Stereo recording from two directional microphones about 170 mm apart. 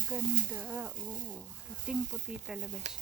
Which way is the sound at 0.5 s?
10° right (ahead or behind).